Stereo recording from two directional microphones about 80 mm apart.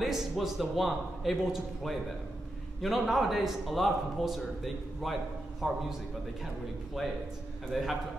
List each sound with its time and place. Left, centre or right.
0.0 s a man's voice: centre
7.7 s a man's voice: centre